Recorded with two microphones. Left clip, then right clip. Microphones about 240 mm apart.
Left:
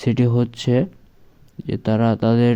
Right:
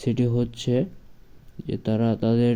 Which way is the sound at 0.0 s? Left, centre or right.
Centre.